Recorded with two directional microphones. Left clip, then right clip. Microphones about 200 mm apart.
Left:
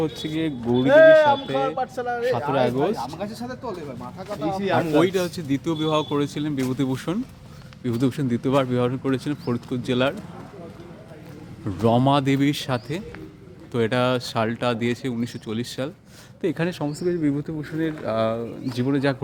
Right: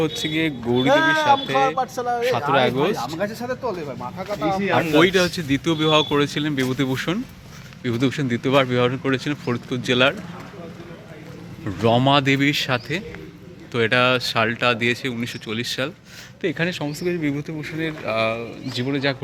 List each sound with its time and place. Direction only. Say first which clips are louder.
0.0 s speech: right 4 dB; 15° left (ahead or behind)
1.7 s speech: right 3 dB; 50° right (ahead or behind)
2.5 s speech: right 4 dB; 15° left (ahead or behind)
3.2 s speech: right 7 dB; 30° right (ahead or behind)
4.8 s speech: right 5 dB; 5° left (ahead or behind)
11.6 s speech: right 2 dB; 20° left (ahead or behind); by 19.1 s 40° left (ahead or behind)